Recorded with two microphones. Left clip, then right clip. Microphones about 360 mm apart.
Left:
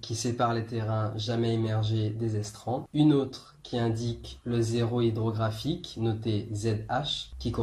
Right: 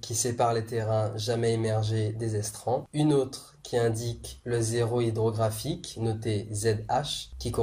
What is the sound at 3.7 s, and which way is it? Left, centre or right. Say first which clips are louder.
Speech: right 4 dB; centre.